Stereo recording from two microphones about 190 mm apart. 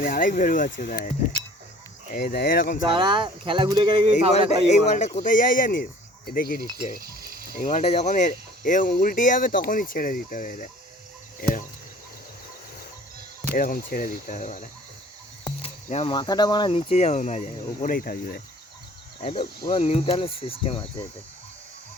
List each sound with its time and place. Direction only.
0.0 s speech: 45° left (ahead or behind)
2.1 s speech: 55° left (ahead or behind)
2.8 s speech: 25° right (ahead or behind)
4.9 s speech: 35° left (ahead or behind)
6.9 s frying: 50° right (ahead or behind)
7.5 s speech: 45° left (ahead or behind)
7.8 s speech: 35° left (ahead or behind)
11.3 s a sound: 50° left (ahead or behind)
13.5 s speech: 50° left (ahead or behind)
15.6 s speech: 30° left (ahead or behind); by 18.4 s 55° left (ahead or behind)
19.2 s speech: 25° left (ahead or behind)